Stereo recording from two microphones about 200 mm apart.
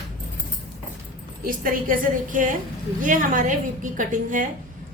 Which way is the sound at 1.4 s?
45° right (ahead or behind).